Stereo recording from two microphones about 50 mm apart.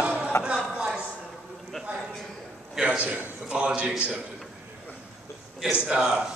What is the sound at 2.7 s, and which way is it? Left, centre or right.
A man's voice, centre.